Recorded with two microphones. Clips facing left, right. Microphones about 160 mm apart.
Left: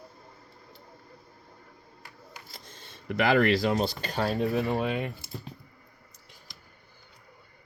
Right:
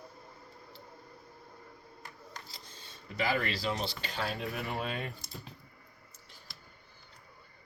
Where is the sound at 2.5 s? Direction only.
55° left (ahead or behind).